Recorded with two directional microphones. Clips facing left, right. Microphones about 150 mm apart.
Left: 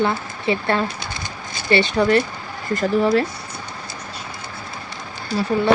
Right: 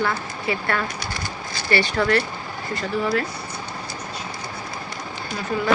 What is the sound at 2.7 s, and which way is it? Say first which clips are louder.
Speech: left 7 dB; 45° left (ahead or behind).